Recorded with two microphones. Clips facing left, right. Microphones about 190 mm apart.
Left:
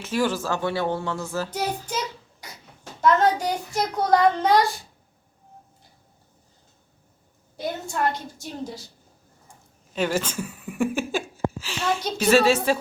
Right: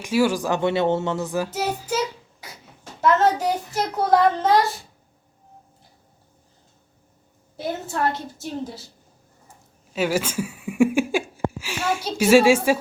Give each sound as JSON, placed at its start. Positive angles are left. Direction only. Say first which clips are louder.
{"t": 0.0, "sound": "speech", "louder": "right 4 dB", "side_deg": -10}
{"t": 1.5, "sound": "child singing", "louder": "right 3 dB", "side_deg": -5}
{"t": 2.4, "sound": "beatboxing", "louder": "right 1 dB", "side_deg": -5}
{"t": 3.0, "sound": "a child's voice", "louder": "right 1 dB", "side_deg": -5}
{"t": 7.5, "sound": "a woman's voice", "louder": "right 2 dB", "side_deg": -5}
{"t": 9.9, "sound": "a sound", "louder": "right 2 dB", "side_deg": -10}